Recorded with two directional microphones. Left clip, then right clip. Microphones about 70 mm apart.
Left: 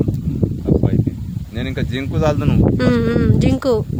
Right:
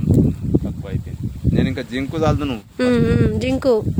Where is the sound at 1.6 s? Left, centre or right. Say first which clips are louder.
Right 1 dB; left.